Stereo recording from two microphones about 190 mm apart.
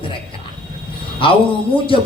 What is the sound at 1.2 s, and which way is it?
Speech, 25° left (ahead or behind).